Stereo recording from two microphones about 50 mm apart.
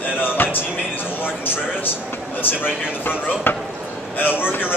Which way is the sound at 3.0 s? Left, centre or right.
Left.